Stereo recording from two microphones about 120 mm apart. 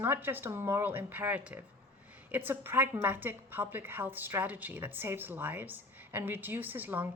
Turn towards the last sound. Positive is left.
turn(degrees=-15)  # may be behind; listen again after turning